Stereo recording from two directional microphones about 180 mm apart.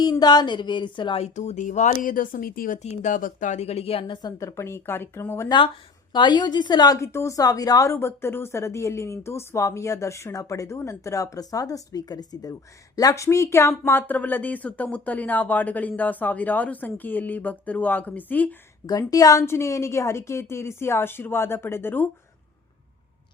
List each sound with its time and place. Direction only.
0.0 s a woman's voice: 20° left (ahead or behind)
6.1 s a woman's voice: 25° left (ahead or behind); by 18.5 s 10° left (ahead or behind)
18.9 s a woman's voice: 20° left (ahead or behind)